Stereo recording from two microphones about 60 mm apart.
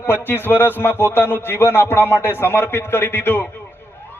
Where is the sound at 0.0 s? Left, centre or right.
Left.